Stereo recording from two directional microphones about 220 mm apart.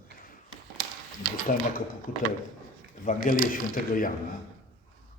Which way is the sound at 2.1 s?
40° left (ahead or behind).